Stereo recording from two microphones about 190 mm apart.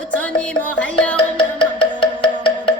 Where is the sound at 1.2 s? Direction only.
25° left (ahead or behind).